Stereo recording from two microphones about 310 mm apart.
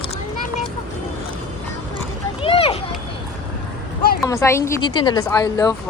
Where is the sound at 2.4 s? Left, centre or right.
Centre.